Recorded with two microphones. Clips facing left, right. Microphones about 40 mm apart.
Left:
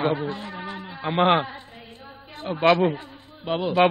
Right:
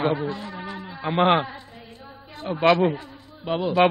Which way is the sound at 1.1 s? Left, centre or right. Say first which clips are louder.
Even; centre.